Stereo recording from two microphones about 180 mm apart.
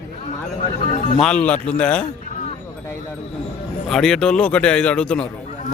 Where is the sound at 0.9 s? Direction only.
50° left (ahead or behind).